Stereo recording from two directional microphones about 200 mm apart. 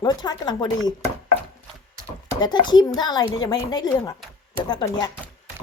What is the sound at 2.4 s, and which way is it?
A child's voice, 20° left (ahead or behind).